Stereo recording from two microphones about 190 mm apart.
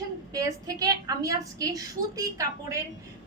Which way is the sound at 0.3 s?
15° right (ahead or behind).